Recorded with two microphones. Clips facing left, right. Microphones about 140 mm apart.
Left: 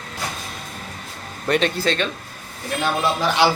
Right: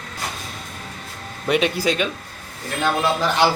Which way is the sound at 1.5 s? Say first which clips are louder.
Even; 10° right (ahead or behind).